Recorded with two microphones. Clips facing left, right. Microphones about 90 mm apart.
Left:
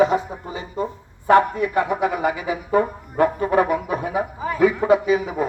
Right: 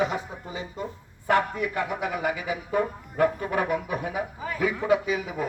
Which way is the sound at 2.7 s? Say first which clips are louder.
Left 7 dB; 40° left (ahead or behind).